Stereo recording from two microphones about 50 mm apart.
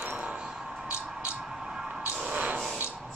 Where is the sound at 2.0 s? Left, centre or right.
Right.